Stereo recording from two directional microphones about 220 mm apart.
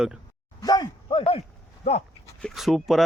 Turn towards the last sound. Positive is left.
turn(degrees=0)  # may be behind; listen again after turning